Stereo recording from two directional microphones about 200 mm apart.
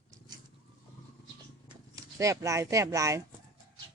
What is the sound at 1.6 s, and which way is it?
Speech, 15° right (ahead or behind).